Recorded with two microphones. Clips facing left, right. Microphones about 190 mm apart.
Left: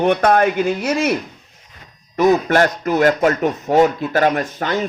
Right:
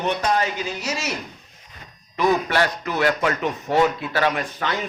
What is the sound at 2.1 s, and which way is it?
A man's voice, 45° left (ahead or behind).